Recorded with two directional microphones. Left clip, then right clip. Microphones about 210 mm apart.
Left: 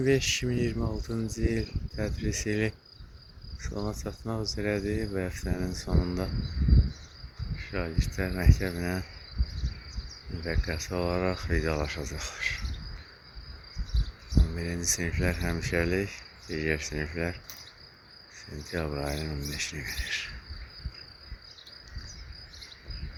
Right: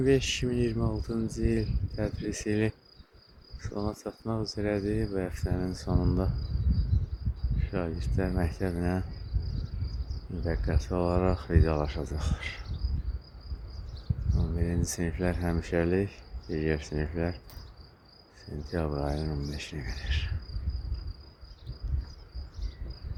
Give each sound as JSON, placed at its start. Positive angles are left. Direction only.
{"t": 0.0, "sound": "speech", "side_deg": -25}
{"t": 0.8, "sound": "speech", "side_deg": -15}
{"t": 1.0, "sound": "speech", "side_deg": -25}
{"t": 3.8, "sound": "speech", "side_deg": -20}
{"t": 7.6, "sound": "speech", "side_deg": -25}
{"t": 10.4, "sound": "speech", "side_deg": -25}
{"t": 14.5, "sound": "speech", "side_deg": -25}
{"t": 18.7, "sound": "speech", "side_deg": -25}